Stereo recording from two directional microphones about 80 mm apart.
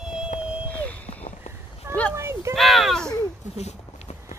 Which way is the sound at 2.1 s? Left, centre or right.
Right.